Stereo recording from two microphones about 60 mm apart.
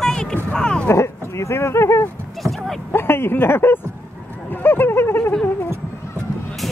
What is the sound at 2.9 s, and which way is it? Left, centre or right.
Speech, left.